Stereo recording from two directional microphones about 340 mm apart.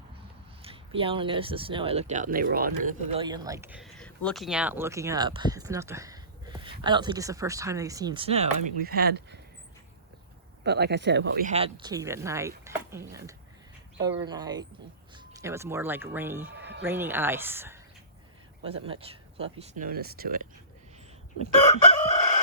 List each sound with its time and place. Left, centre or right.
0.6 s speech: centre
10.6 s speech: right; by 16.5 s centre
16.5 s a sound: right
16.8 s speech: centre; by 20.5 s right